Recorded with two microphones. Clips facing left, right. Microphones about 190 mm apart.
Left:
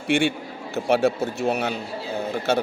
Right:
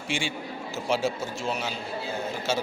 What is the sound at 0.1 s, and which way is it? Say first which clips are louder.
A man's voice: left 10 dB; 60° left (ahead or behind).